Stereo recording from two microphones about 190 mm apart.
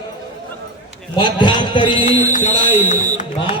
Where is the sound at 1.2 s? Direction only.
25° left (ahead or behind).